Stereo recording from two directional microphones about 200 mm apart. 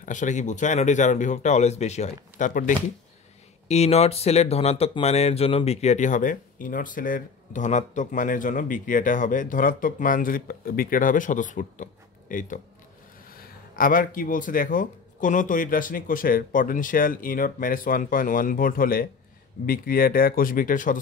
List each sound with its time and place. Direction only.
0.0 s speech: 40° left (ahead or behind)